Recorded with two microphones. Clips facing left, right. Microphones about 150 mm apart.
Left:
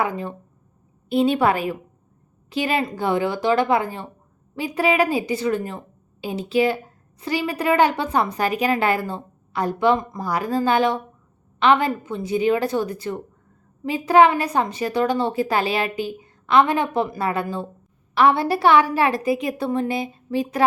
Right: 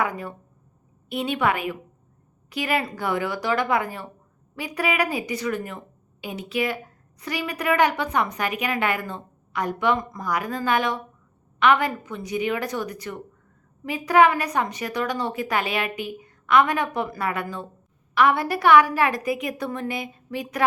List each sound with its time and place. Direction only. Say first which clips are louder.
0.0 s a woman's voice: left 2 dB; 25° left (ahead or behind)